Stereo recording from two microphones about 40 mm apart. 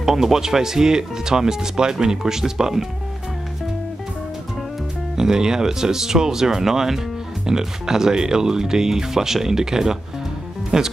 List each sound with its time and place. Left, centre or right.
0.0 s speech: centre
5.1 s speech: centre